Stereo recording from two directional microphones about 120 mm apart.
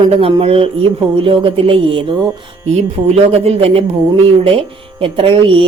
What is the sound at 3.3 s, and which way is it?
Speech, 55° right (ahead or behind).